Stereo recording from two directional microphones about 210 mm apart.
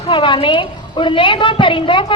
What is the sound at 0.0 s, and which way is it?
A woman's voice, 25° left (ahead or behind).